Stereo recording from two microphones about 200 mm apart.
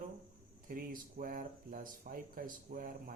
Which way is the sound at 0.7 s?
45° right (ahead or behind).